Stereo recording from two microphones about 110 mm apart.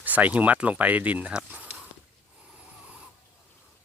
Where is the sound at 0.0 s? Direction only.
15° right (ahead or behind).